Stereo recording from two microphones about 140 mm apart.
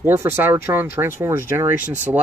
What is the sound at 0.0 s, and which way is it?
Speech, 15° right (ahead or behind).